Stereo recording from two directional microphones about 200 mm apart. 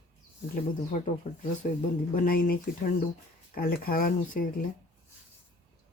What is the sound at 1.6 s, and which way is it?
Speech, 40° left (ahead or behind).